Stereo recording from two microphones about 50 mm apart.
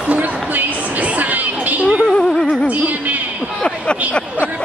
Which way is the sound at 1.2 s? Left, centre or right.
Right.